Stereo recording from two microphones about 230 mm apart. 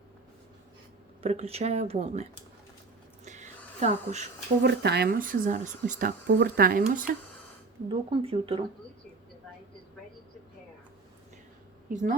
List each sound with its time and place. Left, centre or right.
1.2 s speech: right
3.2 s a sound: right
4.6 s speech: right
7.9 s speech: right
11.9 s a woman's voice: right